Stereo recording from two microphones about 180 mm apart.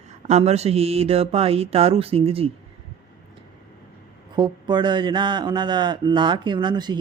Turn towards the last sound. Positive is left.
turn(degrees=-25)  # may be behind; listen again after turning